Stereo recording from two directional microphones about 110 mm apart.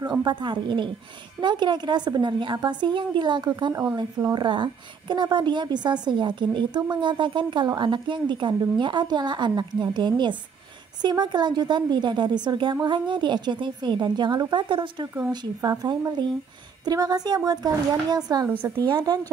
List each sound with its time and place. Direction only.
0.0 s a woman's voice: 40° right (ahead or behind)
15.6 s a woman's voice: 35° right (ahead or behind)